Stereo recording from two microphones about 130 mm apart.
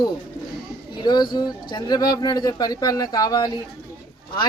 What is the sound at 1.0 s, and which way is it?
Speech, 35° left (ahead or behind).